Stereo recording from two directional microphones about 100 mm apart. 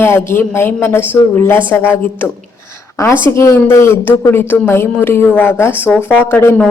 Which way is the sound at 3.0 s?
25° left (ahead or behind).